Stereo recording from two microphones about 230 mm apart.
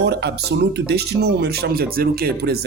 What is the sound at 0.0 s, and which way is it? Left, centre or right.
Speech, right.